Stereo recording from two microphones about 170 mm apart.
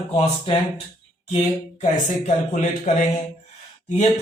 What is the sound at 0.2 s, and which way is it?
Speech, 35° left (ahead or behind).